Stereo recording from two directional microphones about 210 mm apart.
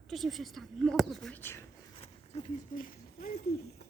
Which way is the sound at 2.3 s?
30° left (ahead or behind).